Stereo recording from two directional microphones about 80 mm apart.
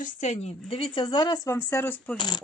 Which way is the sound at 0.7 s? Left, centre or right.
Left.